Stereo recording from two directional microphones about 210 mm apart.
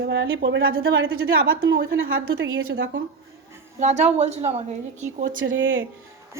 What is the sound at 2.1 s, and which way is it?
Speech, 70° right (ahead or behind).